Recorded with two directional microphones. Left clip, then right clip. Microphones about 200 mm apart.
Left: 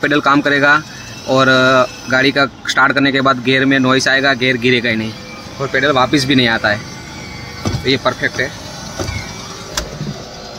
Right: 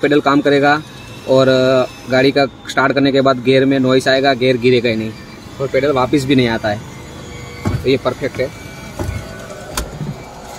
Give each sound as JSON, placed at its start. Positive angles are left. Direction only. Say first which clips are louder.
{"t": 0.0, "sound": "speech", "louder": "even", "side_deg": 0}
{"t": 7.8, "sound": "speech", "louder": "left 1 dB", "side_deg": 0}